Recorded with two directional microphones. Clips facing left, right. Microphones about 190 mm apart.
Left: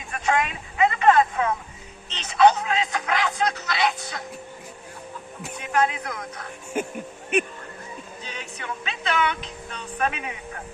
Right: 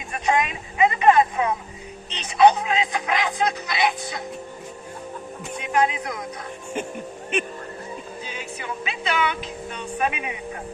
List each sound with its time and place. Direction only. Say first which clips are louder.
0.1 s speech: right 1 dB; 20° right (ahead or behind)
5.7 s speech: right 1 dB; 15° right (ahead or behind)
6.7 s speech: left 2 dB; 5° left (ahead or behind)
8.2 s speech: right 3 dB; 5° right (ahead or behind)